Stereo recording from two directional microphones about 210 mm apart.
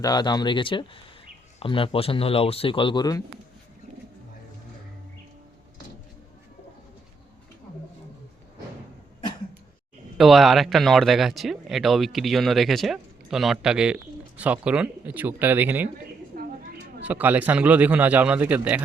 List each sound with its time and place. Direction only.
0.0 s speech: 20° left (ahead or behind)
10.2 s speech: centre (ahead or behind)
16.3 s a sound: 40° right (ahead or behind)
17.0 s a man's voice: 5° right (ahead or behind)